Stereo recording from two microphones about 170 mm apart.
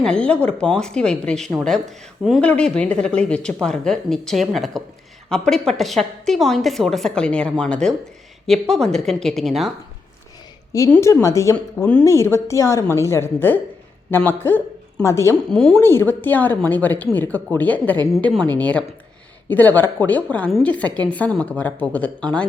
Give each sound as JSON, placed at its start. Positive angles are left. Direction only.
{"t": 0.0, "sound": "speech", "side_deg": 5}
{"t": 10.9, "sound": "a woman's voice", "side_deg": 15}
{"t": 15.4, "sound": "speech", "side_deg": 5}
{"t": 15.8, "sound": "speech", "side_deg": 15}